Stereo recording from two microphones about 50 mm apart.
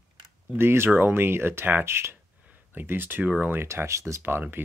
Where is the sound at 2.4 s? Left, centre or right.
Right.